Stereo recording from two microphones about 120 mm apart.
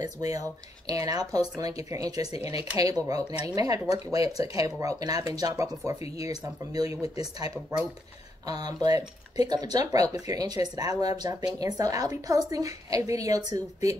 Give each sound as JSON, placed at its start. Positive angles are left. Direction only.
{"t": 0.0, "sound": "speech", "side_deg": -30}